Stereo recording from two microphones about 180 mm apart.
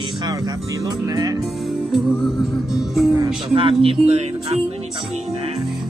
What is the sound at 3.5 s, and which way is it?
Speech, 30° right (ahead or behind).